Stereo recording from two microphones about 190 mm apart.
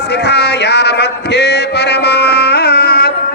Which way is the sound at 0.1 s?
60° left (ahead or behind).